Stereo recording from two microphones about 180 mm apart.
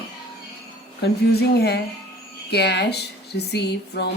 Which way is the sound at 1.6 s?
65° left (ahead or behind).